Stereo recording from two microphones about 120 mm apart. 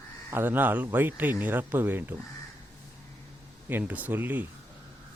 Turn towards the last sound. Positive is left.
turn(degrees=-15)  # may be behind; listen again after turning